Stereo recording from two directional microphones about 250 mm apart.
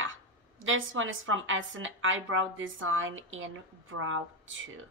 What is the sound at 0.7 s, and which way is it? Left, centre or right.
A woman's voice, right.